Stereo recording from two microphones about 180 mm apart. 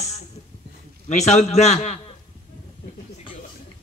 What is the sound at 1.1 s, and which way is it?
Speech, 40° left (ahead or behind).